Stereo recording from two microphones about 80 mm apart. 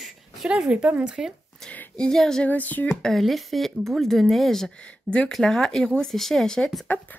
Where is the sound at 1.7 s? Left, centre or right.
Centre.